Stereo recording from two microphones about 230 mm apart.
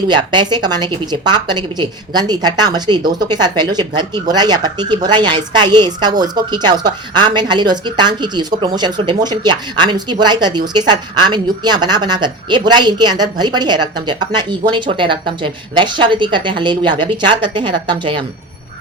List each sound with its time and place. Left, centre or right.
0.1 s a woman's voice: centre